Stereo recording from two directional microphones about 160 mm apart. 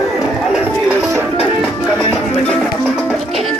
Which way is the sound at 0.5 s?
5° right (ahead or behind).